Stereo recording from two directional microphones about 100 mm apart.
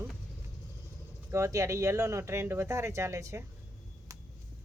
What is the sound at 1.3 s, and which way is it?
Speech, 30° right (ahead or behind).